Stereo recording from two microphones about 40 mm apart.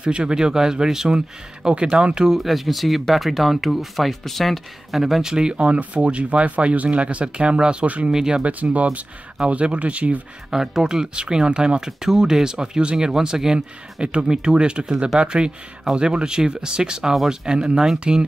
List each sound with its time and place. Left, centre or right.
0.0 s speech: right
2.3 s speech: centre
5.0 s speech: centre
5.6 s speech: right
7.8 s speech: right
8.1 s speech: centre
8.5 s speech: right
10.5 s speech: centre